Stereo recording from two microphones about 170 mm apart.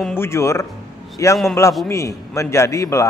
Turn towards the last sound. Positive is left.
turn(degrees=20)  # may be behind; listen again after turning